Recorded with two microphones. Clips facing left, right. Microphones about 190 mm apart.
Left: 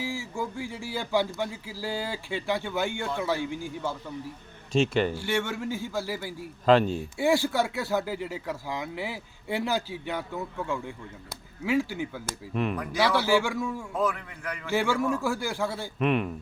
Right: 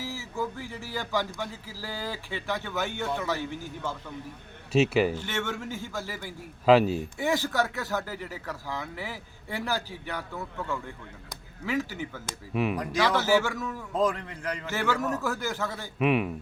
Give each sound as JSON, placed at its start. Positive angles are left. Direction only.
{"t": 0.0, "sound": "speech", "side_deg": 15}
{"t": 4.7, "sound": "speech", "side_deg": -5}
{"t": 5.1, "sound": "speech", "side_deg": 10}
{"t": 6.7, "sound": "speech", "side_deg": -5}
{"t": 7.2, "sound": "speech", "side_deg": 10}
{"t": 12.5, "sound": "speech", "side_deg": -5}
{"t": 13.1, "sound": "speech", "side_deg": 15}
{"t": 13.9, "sound": "a man's voice", "side_deg": -25}
{"t": 14.7, "sound": "speech", "side_deg": 10}
{"t": 16.0, "sound": "speech", "side_deg": -5}